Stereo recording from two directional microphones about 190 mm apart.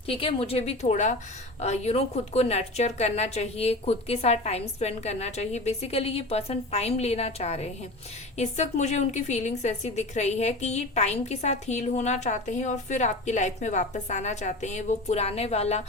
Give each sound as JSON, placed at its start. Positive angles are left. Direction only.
{"t": 0.1, "sound": "a woman's voice", "side_deg": 30}